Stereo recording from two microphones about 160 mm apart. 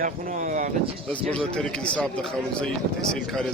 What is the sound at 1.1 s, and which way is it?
Speech, 5° left (ahead or behind).